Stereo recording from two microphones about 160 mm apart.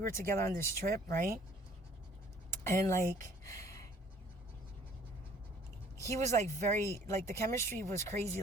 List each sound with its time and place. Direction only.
0.3 s speech: 15° left (ahead or behind)
0.9 s speech: 65° right (ahead or behind)
2.5 s speech: 15° left (ahead or behind)
3.0 s speech: 55° right (ahead or behind)
3.4 s a sound: 20° left (ahead or behind)
6.0 s speech: 20° left (ahead or behind)
6.2 s speech: 45° right (ahead or behind)
6.7 s speech: 15° left (ahead or behind)
7.9 s speech: 45° right (ahead or behind)